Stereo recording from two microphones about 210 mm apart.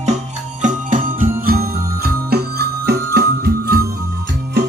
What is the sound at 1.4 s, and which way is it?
Jingle bell, 45° right (ahead or behind).